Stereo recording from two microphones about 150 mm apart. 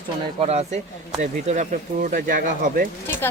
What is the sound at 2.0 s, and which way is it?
Speech, 65° right (ahead or behind).